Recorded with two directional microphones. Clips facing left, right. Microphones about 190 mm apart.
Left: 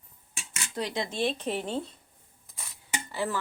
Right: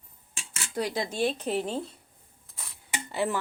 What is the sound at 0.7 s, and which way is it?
Speech, 5° right (ahead or behind).